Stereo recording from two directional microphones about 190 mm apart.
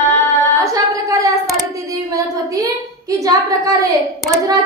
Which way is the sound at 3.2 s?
15° right (ahead or behind).